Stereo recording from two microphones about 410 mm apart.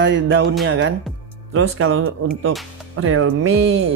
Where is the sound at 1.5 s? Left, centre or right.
Right.